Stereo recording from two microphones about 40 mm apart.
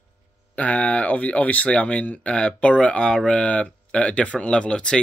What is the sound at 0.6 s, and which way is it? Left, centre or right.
Speech, left.